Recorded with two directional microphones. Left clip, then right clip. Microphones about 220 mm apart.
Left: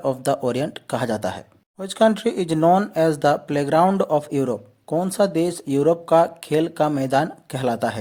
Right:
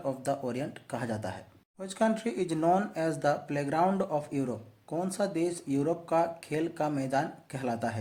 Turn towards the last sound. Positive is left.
turn(degrees=40)  # may be behind; listen again after turning